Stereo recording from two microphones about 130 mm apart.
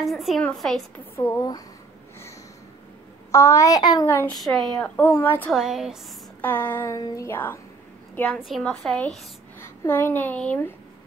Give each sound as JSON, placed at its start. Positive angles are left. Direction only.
{"t": 0.0, "sound": "a woman's voice", "side_deg": 0}
{"t": 0.9, "sound": "a child's voice", "side_deg": 20}
{"t": 3.3, "sound": "a child's voice", "side_deg": 25}
{"t": 4.4, "sound": "a woman's voice", "side_deg": 0}
{"t": 5.5, "sound": "a woman's voice", "side_deg": -5}
{"t": 6.4, "sound": "a woman's voice", "side_deg": 15}
{"t": 8.5, "sound": "a woman's voice", "side_deg": 0}
{"t": 9.8, "sound": "a woman's voice", "side_deg": 15}